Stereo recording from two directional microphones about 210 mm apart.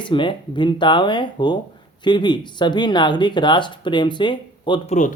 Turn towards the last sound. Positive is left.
turn(degrees=20)  # may be behind; listen again after turning